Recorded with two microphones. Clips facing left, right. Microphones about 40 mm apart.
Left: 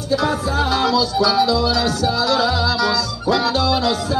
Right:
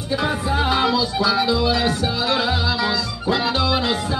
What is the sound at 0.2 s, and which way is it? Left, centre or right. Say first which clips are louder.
Music: left 2 dB; right.